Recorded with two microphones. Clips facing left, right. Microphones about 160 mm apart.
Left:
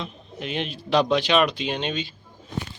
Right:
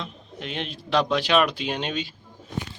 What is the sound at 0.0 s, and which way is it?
Speech, 5° left (ahead or behind).